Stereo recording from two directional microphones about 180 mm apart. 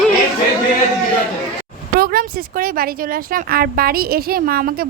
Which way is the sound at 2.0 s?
55° right (ahead or behind).